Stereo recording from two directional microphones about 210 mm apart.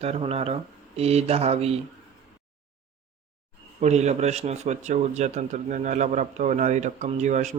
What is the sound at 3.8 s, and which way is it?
A man's voice, 30° right (ahead or behind).